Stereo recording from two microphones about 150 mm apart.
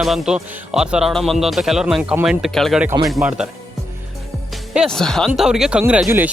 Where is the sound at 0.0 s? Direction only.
5° right (ahead or behind).